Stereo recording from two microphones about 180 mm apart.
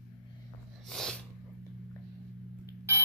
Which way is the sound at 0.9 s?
5° left (ahead or behind).